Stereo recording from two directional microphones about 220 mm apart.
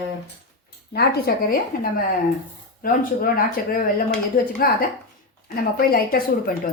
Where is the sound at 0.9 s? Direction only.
45° left (ahead or behind).